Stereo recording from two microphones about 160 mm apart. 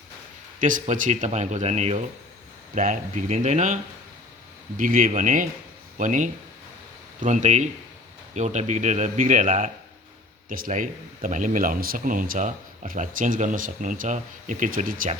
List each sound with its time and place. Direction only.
0.6 s speech: 55° right (ahead or behind)
4.8 s speech: 55° right (ahead or behind)